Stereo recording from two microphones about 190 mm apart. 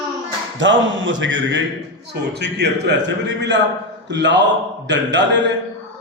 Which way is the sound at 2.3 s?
60° right (ahead or behind).